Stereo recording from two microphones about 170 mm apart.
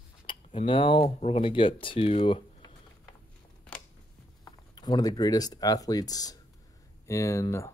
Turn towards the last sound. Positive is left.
turn(degrees=15)  # may be behind; listen again after turning